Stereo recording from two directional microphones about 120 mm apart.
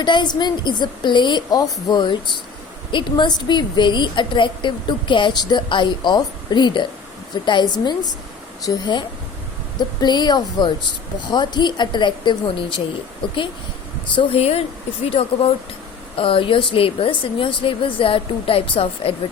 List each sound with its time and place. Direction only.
0.0 s a woman's voice: 40° left (ahead or behind)
14.2 s speech: 55° left (ahead or behind)